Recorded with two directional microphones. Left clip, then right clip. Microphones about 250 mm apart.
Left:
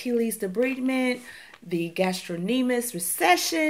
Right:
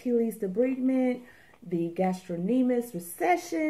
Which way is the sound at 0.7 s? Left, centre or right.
Left.